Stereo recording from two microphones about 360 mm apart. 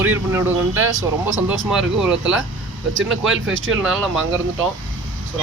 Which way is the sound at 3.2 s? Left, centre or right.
Right.